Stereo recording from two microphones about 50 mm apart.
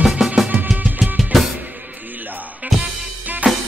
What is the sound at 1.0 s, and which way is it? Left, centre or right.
Drum kit, centre.